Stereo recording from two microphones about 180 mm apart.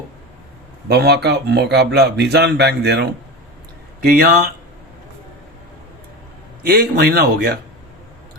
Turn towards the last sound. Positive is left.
turn(degrees=-60)  # may be behind; listen again after turning